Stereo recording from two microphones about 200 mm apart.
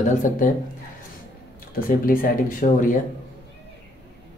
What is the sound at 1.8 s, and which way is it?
Speech, 45° left (ahead or behind).